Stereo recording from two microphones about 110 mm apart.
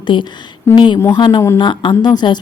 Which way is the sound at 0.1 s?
50° left (ahead or behind).